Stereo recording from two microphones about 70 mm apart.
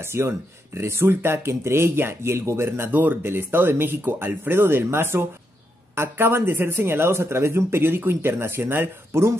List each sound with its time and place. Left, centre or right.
0.0 s speech: right
2.9 s speech: right